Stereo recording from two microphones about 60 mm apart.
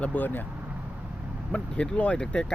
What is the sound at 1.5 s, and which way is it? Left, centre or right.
Speech, centre.